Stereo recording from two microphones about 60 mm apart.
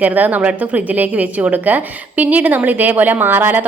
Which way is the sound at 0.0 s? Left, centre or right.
Right.